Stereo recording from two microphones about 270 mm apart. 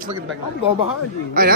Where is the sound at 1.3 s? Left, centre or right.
Right.